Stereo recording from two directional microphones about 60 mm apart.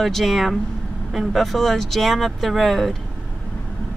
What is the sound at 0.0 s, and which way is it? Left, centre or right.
Speech, centre.